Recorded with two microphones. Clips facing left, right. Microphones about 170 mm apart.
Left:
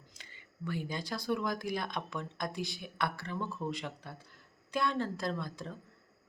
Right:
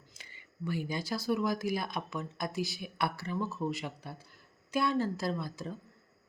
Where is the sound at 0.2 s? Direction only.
10° right (ahead or behind).